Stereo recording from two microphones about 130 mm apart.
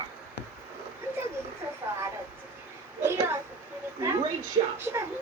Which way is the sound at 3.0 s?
20° right (ahead or behind).